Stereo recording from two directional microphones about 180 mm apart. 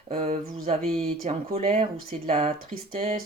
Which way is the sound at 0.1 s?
40° right (ahead or behind).